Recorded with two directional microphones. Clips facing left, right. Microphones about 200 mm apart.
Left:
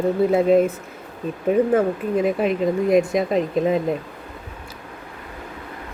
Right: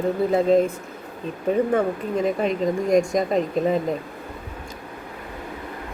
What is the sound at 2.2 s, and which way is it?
Speech, 5° left (ahead or behind).